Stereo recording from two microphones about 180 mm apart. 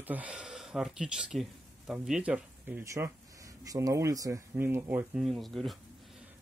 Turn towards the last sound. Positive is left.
turn(degrees=0)  # may be behind; listen again after turning